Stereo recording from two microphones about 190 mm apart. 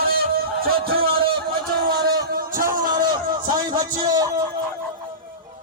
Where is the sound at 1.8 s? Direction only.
55° right (ahead or behind).